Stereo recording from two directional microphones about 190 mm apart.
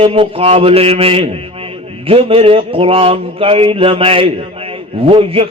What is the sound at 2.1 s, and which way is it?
A man's voice, 30° right (ahead or behind).